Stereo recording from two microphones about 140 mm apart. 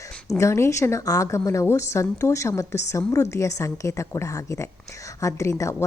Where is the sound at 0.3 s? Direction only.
20° left (ahead or behind).